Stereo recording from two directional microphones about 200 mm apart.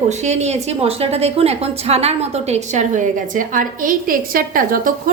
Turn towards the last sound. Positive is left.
turn(degrees=-45)  # may be behind; listen again after turning